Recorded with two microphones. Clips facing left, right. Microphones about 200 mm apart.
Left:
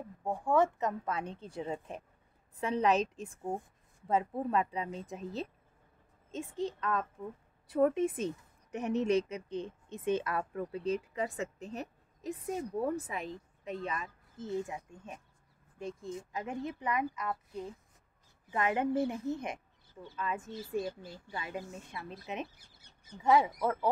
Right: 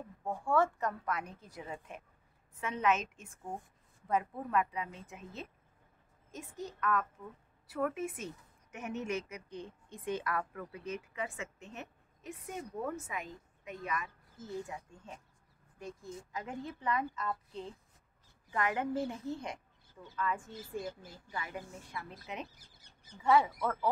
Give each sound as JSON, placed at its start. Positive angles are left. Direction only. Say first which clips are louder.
{"t": 0.2, "sound": "a woman's voice", "louder": "left 2 dB", "side_deg": 15}